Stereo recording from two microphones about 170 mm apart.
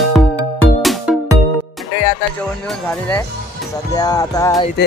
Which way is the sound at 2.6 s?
10° left (ahead or behind).